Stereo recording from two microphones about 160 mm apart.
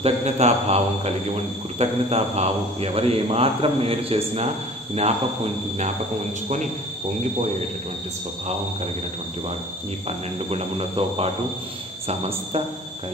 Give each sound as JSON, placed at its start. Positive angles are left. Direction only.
{"t": 0.0, "sound": "speech", "side_deg": -45}
{"t": 10.0, "sound": "speech", "side_deg": -40}